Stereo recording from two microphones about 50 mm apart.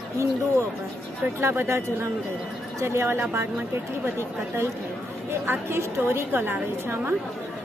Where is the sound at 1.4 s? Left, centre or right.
Right.